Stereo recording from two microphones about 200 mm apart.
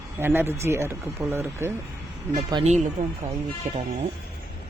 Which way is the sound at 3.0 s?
35° right (ahead or behind).